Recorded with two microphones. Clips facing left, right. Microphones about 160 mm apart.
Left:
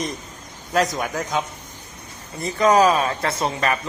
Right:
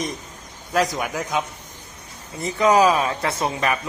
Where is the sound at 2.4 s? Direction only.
15° right (ahead or behind).